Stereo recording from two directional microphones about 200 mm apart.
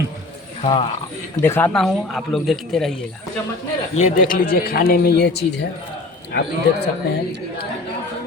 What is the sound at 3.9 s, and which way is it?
A man's voice, 40° left (ahead or behind).